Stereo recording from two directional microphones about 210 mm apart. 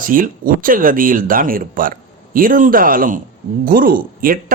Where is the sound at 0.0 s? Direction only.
40° right (ahead or behind).